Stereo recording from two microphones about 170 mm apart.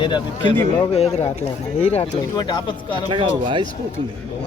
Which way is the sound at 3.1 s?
30° right (ahead or behind).